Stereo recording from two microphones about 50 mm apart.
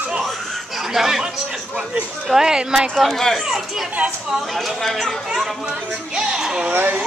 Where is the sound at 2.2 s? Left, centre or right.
Centre.